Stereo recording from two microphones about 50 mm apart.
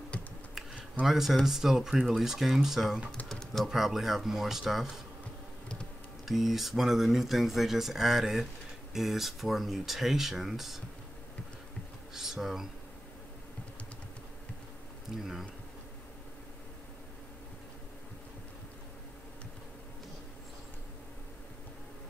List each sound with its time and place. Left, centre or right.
1.0 s speech: centre
3.3 s typing: centre
3.6 s speech: centre
6.2 s speech: centre
12.1 s speech: centre
15.1 s speech: centre